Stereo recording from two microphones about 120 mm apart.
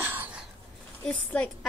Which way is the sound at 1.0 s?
10° left (ahead or behind).